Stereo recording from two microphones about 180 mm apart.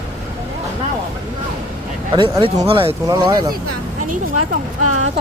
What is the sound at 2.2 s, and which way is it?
Speech, 25° right (ahead or behind).